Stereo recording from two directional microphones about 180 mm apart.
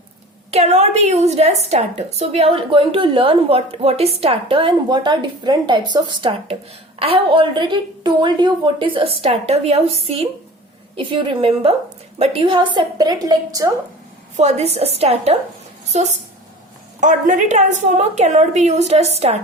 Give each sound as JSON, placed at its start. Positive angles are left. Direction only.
{"t": 0.5, "sound": "a woman's voice", "side_deg": -35}
{"t": 14.3, "sound": "a woman's voice", "side_deg": -40}